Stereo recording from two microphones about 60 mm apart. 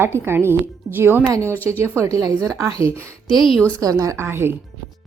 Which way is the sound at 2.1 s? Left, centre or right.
Right.